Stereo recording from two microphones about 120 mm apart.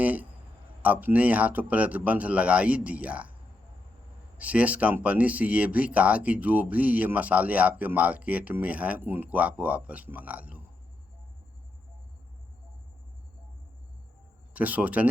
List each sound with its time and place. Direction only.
0.0 s a sound: 15° right (ahead or behind)
0.8 s speech: 15° right (ahead or behind)
4.4 s speech: 10° right (ahead or behind)
14.5 s speech: 10° right (ahead or behind)